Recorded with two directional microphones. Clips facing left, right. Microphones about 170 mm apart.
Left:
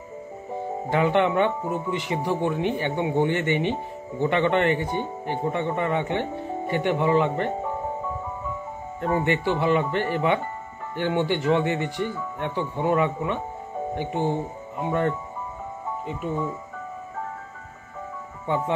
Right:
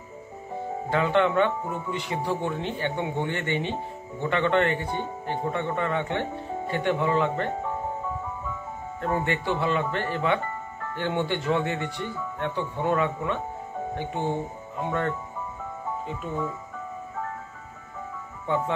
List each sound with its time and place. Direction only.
0.8 s speech: 15° left (ahead or behind)
9.0 s speech: 15° left (ahead or behind)